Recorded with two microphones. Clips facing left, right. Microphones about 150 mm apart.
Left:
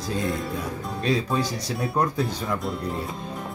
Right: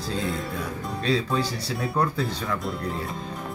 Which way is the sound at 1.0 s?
15° left (ahead or behind).